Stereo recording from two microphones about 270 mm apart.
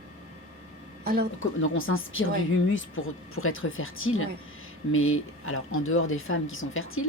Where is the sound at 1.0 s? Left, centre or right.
Right.